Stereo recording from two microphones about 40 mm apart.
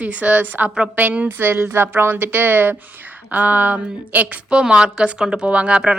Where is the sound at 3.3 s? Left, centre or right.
Right.